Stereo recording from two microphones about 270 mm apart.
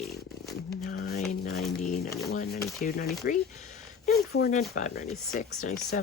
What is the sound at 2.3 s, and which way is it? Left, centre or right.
Speech, left.